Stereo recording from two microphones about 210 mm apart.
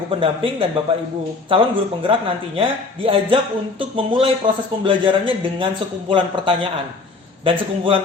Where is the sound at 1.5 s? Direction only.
25° right (ahead or behind).